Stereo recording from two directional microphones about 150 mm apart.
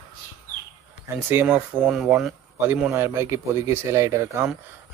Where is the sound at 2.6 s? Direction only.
15° right (ahead or behind).